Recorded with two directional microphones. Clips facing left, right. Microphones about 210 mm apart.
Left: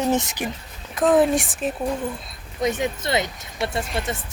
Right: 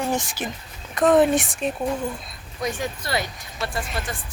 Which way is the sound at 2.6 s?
20° left (ahead or behind).